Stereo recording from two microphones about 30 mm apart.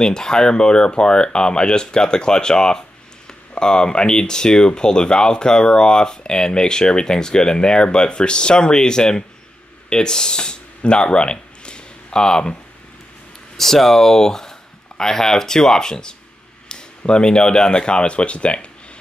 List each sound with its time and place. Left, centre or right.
0.0 s speech: left
13.6 s speech: centre; by 18.7 s left